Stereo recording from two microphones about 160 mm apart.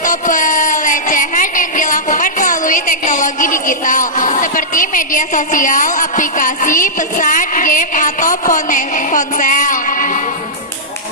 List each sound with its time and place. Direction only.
0.0 s music: 55° left (ahead or behind)